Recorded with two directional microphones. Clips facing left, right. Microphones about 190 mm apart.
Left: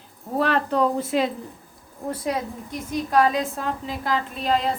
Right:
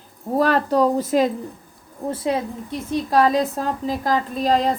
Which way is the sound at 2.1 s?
25° right (ahead or behind).